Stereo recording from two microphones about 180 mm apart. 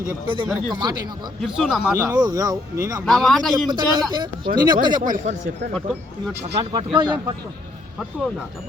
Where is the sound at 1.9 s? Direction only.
20° right (ahead or behind).